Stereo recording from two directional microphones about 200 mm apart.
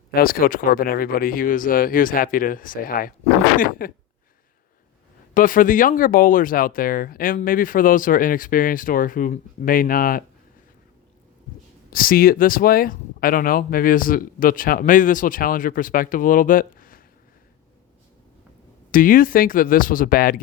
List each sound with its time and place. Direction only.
0.1 s speech: 45° left (ahead or behind)
5.3 s speech: 45° left (ahead or behind)
11.9 s speech: 45° left (ahead or behind)
18.9 s speech: 45° left (ahead or behind)